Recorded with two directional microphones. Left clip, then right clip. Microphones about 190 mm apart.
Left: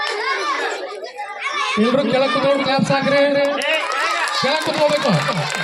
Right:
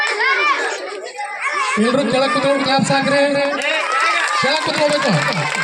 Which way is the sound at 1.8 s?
20° right (ahead or behind).